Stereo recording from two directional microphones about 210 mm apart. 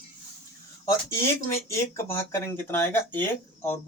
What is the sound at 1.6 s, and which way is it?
Speech, 10° left (ahead or behind).